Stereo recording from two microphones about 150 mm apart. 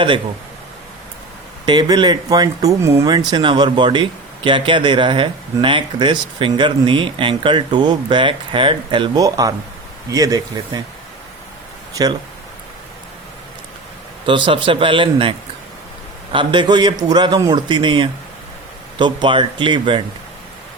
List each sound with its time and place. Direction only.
1.6 s speech: 30° right (ahead or behind)
12.0 s speech: 25° right (ahead or behind)
14.3 s speech: 35° right (ahead or behind)